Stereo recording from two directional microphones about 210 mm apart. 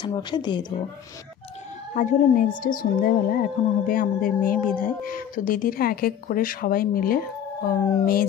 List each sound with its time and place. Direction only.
0.0 s a woman's voice: 20° left (ahead or behind)
2.0 s speech: 35° left (ahead or behind)